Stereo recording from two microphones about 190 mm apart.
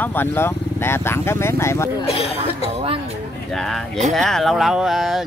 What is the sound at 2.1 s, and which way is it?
Speech, 30° left (ahead or behind).